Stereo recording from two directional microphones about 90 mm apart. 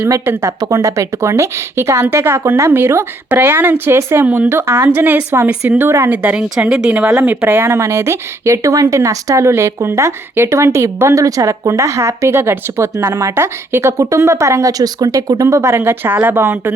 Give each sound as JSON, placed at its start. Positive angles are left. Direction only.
{"t": 0.0, "sound": "speech", "side_deg": -30}
{"t": 0.6, "sound": "speech", "side_deg": -40}
{"t": 4.9, "sound": "speech", "side_deg": -20}
{"t": 6.2, "sound": "a woman's voice", "side_deg": -15}